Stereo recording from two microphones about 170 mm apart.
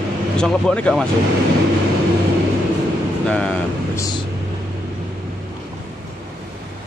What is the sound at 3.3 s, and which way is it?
Speech, 5° left (ahead or behind).